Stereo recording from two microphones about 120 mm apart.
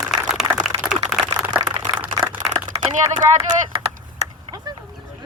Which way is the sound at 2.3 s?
15° right (ahead or behind).